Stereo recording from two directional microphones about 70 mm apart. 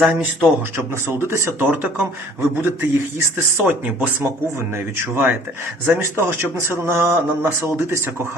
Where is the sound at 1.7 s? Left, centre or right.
Right.